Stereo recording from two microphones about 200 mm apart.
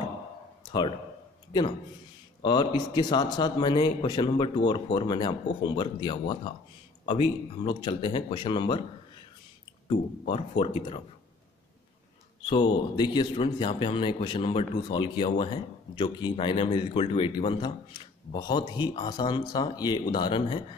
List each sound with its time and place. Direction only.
0.7 s speech: 20° left (ahead or behind)
2.4 s a man's voice: 20° left (ahead or behind)
9.8 s a man's voice: 25° left (ahead or behind)
12.4 s a man's voice: 25° left (ahead or behind)